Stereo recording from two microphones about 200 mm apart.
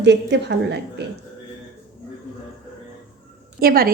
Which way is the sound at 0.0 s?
60° right (ahead or behind).